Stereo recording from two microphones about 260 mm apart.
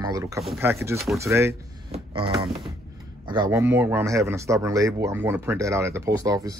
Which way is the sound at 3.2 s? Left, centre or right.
Centre.